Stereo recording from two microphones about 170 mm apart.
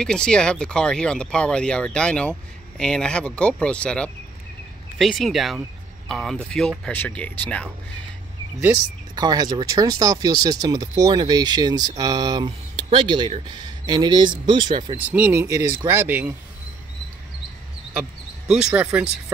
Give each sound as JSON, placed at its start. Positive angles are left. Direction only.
{"t": 0.0, "sound": "speech", "side_deg": 5}
{"t": 8.5, "sound": "speech", "side_deg": -20}
{"t": 15.0, "sound": "speech", "side_deg": -10}
{"t": 18.5, "sound": "speech", "side_deg": -5}